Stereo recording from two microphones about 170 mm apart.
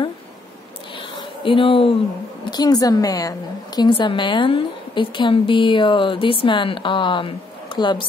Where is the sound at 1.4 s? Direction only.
30° left (ahead or behind).